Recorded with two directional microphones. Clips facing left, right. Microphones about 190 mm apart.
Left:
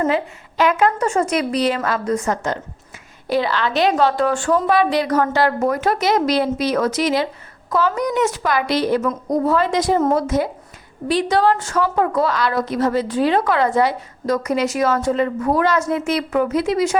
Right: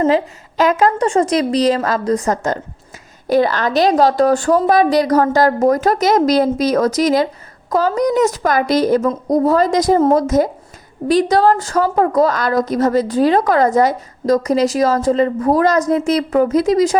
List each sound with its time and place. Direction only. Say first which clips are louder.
0.0 s a woman's voice: right 5 dB; 35° right (ahead or behind)